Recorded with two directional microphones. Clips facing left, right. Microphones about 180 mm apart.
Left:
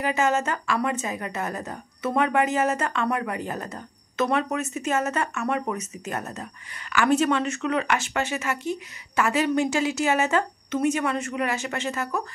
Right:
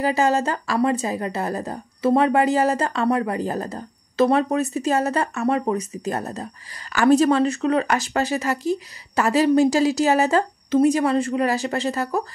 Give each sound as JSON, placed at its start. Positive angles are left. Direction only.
{"t": 0.0, "sound": "a woman's voice", "side_deg": -35}